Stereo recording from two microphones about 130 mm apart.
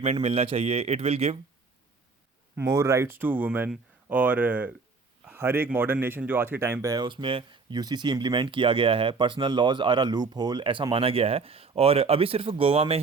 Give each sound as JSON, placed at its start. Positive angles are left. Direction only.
{"t": 0.0, "sound": "speech", "side_deg": -50}
{"t": 2.6, "sound": "speech", "side_deg": -25}
{"t": 6.9, "sound": "speech", "side_deg": -35}